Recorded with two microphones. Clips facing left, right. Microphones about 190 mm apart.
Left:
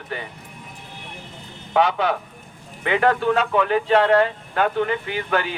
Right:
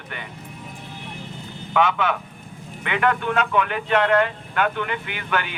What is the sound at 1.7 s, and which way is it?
A man's voice, 35° left (ahead or behind).